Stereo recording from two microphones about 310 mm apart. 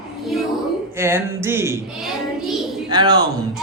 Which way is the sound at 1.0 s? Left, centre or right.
Centre.